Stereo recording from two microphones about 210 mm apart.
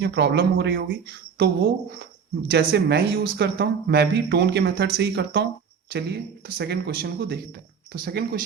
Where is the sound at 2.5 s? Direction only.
50° right (ahead or behind).